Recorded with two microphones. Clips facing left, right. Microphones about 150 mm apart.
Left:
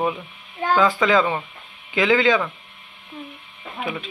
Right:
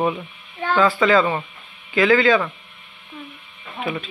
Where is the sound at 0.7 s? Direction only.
15° left (ahead or behind).